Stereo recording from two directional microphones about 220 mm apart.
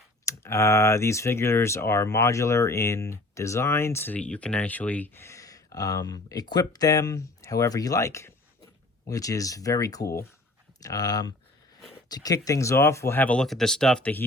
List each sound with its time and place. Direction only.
0.3 s speech: 15° left (ahead or behind)